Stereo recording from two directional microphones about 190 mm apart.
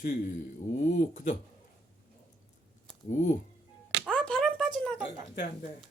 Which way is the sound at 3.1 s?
40° left (ahead or behind).